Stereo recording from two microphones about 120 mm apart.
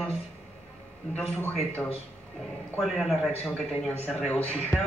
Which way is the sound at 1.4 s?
15° left (ahead or behind).